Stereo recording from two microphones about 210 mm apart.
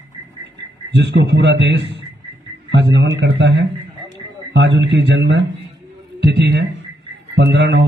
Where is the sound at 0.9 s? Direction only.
55° right (ahead or behind).